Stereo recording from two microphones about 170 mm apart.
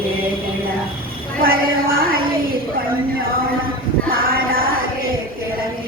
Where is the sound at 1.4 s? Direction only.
60° right (ahead or behind).